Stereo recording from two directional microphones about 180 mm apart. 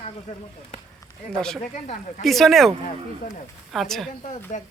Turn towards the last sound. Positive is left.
turn(degrees=45)  # may be behind; listen again after turning